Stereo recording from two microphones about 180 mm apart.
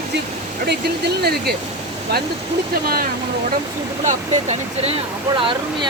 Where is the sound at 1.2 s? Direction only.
60° right (ahead or behind).